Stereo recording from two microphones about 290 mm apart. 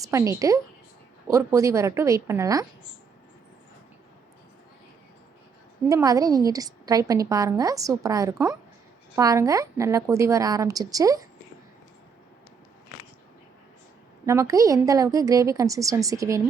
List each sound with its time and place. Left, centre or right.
0.0 s a woman's voice: centre
5.9 s a woman's voice: centre
14.3 s a woman's voice: centre